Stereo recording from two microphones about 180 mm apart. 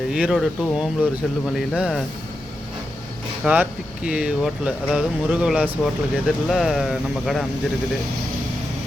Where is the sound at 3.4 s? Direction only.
5° right (ahead or behind).